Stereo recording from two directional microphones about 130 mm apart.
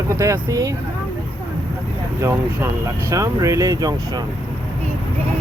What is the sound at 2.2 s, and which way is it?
Speech, 20° right (ahead or behind).